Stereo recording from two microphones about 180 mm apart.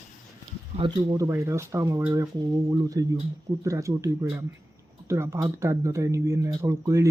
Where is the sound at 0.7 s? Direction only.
25° right (ahead or behind).